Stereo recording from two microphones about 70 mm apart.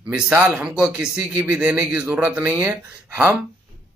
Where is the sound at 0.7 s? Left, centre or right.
Centre.